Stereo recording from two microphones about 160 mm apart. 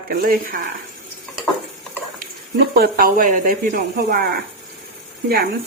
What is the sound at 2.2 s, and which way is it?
Speech, 65° right (ahead or behind).